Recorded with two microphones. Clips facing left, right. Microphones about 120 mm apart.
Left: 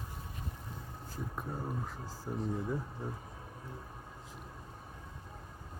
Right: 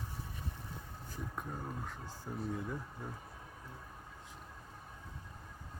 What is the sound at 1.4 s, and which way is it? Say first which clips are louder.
Speech: left 4 dB; 10° left (ahead or behind).